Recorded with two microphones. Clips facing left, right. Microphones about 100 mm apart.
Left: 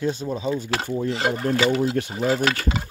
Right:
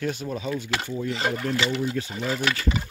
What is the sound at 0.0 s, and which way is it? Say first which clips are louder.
Speech: left 4 dB; 25° left (ahead or behind).